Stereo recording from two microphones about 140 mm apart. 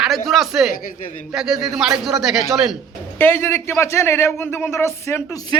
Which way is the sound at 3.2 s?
15° left (ahead or behind).